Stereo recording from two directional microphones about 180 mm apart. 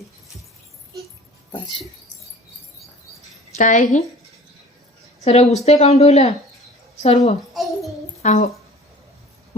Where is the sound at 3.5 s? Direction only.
45° left (ahead or behind).